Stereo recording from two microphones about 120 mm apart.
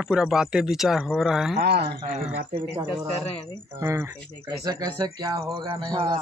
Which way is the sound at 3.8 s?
25° right (ahead or behind).